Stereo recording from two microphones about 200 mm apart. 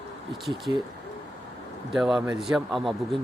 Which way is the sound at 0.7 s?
15° right (ahead or behind).